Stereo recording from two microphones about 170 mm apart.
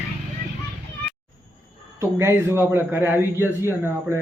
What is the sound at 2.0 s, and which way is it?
A man's voice, 15° right (ahead or behind).